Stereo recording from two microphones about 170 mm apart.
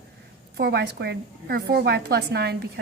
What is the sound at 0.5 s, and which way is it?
A woman's voice, 75° right (ahead or behind).